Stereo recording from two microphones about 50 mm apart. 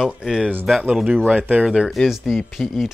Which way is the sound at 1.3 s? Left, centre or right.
Right.